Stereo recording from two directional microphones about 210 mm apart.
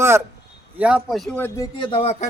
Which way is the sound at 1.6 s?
20° left (ahead or behind).